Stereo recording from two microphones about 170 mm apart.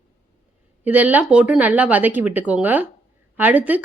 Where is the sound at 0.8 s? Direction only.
10° right (ahead or behind).